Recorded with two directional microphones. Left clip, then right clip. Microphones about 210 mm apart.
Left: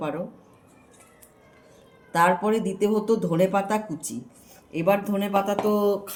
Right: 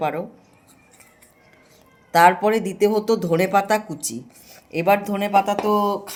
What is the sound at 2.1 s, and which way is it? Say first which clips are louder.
Speech: right 6 dB; 45° right (ahead or behind).